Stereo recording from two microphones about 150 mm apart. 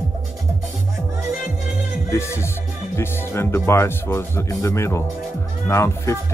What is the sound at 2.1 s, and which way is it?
Music, 20° left (ahead or behind).